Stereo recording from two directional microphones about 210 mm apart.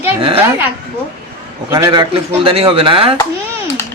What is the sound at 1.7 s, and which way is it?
Speech, 15° right (ahead or behind).